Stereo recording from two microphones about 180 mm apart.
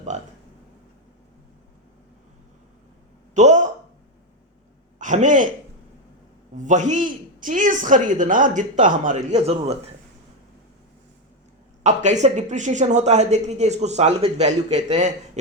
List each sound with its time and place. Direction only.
0.1 s speech: 40° right (ahead or behind)
3.3 s speech: 40° right (ahead or behind)
4.9 s a man's voice: 45° right (ahead or behind)
6.6 s speech: 40° right (ahead or behind)
11.8 s speech: 40° right (ahead or behind)